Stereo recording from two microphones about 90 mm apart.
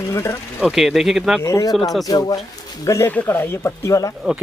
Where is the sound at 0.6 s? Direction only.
5° right (ahead or behind).